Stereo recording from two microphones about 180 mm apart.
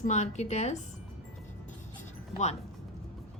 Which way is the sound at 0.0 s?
40° left (ahead or behind).